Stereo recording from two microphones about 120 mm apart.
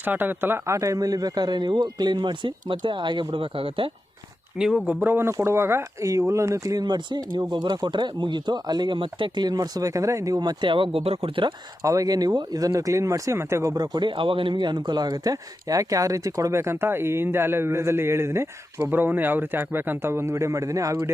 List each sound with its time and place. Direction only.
0.0 s speech: 15° right (ahead or behind); by 3.8 s 45° right (ahead or behind)
4.5 s speech: 5° right (ahead or behind); by 11.5 s 45° right (ahead or behind)
11.8 s speech: 30° right (ahead or behind)